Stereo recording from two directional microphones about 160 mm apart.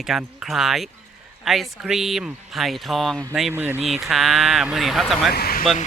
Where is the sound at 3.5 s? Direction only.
15° right (ahead or behind).